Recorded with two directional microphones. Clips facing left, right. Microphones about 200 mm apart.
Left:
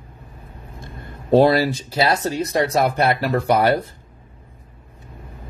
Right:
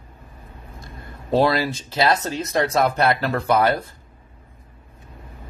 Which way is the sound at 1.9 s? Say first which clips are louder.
Right 1 dB; 15° left (ahead or behind).